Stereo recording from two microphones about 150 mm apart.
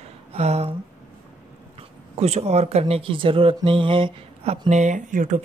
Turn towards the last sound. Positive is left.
turn(degrees=-55)  # may be behind; listen again after turning